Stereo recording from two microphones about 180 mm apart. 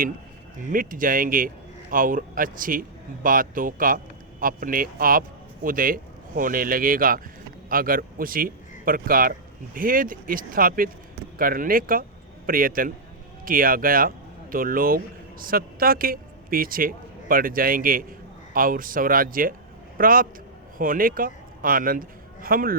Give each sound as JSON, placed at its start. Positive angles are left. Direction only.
{"t": 0.6, "sound": "a man's voice", "side_deg": -50}